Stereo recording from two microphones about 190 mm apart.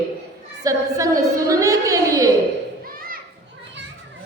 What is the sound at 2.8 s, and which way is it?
Children playing, 50° right (ahead or behind).